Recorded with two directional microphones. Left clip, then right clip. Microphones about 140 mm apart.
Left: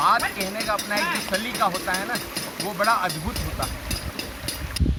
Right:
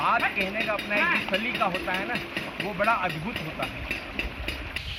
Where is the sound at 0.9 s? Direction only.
70° left (ahead or behind).